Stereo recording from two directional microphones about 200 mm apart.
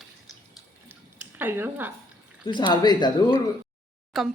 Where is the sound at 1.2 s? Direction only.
10° right (ahead or behind).